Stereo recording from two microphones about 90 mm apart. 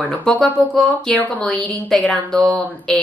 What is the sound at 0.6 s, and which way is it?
Speech, 15° left (ahead or behind).